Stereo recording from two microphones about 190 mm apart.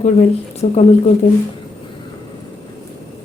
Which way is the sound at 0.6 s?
35° left (ahead or behind).